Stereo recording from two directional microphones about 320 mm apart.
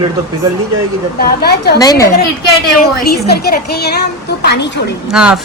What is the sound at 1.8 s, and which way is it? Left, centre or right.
Speech, centre.